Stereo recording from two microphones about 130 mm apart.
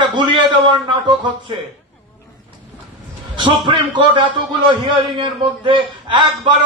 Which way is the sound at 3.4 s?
40° right (ahead or behind).